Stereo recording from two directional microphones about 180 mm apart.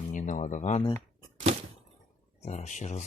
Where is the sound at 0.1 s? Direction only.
45° left (ahead or behind).